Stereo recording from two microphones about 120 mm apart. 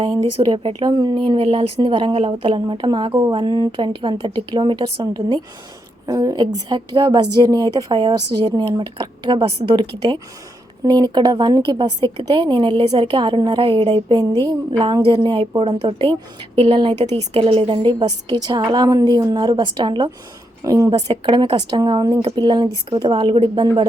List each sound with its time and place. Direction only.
0.3 s a woman's voice: 45° right (ahead or behind)
6.1 s a woman's voice: 30° right (ahead or behind)
20.7 s a woman's voice: 25° right (ahead or behind)
21.1 s a woman's voice: 40° right (ahead or behind)